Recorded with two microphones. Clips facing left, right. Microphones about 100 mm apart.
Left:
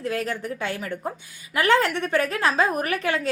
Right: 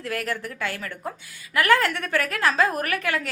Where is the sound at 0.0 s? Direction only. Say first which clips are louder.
Left 2 dB; 20° left (ahead or behind).